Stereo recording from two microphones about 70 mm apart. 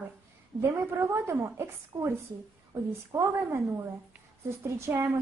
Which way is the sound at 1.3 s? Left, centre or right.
Right.